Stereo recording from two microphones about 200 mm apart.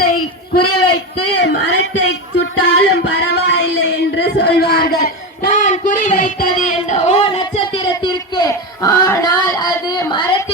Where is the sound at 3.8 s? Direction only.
55° left (ahead or behind).